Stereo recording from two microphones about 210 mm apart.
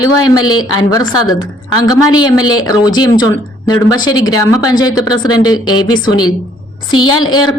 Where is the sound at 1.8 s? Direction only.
20° left (ahead or behind).